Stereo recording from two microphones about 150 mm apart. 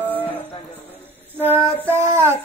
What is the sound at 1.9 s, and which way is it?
Child singing, 15° right (ahead or behind).